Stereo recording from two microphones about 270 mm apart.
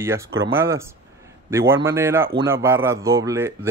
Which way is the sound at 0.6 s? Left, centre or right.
Centre.